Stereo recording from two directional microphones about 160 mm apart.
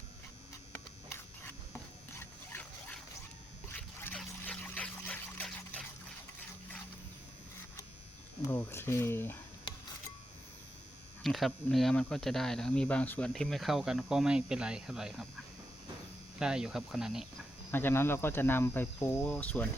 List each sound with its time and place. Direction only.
0.7 s a sound: 15° left (ahead or behind)
2.1 s dog: 10° left (ahead or behind)
3.7 s a sound: 10° left (ahead or behind)
8.4 s speech: 15° left (ahead or behind)
11.2 s speech: centre (ahead or behind)
16.4 s speech: 5° right (ahead or behind)
17.7 s speech: 15° left (ahead or behind)